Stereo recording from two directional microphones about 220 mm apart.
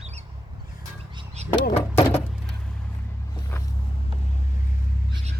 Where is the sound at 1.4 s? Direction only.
30° right (ahead or behind).